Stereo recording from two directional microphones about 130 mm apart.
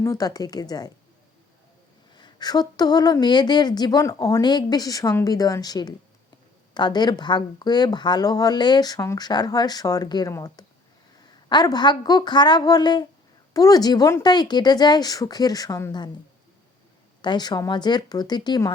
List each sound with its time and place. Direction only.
0.0 s speech: 25° left (ahead or behind)
2.1 s speech: 35° left (ahead or behind)
17.2 s speech: 35° left (ahead or behind)